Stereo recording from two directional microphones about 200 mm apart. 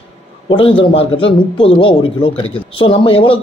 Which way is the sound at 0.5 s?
25° left (ahead or behind).